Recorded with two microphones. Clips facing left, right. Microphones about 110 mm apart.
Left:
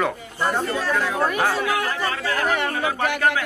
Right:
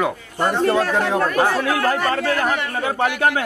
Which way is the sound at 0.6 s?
65° right (ahead or behind).